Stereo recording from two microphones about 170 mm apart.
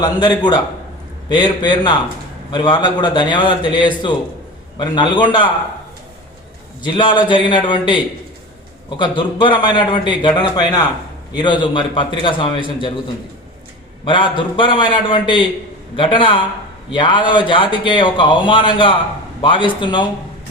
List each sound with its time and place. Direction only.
0.0 s speech: 25° left (ahead or behind)
6.8 s speech: 30° left (ahead or behind)
14.0 s speech: 30° left (ahead or behind)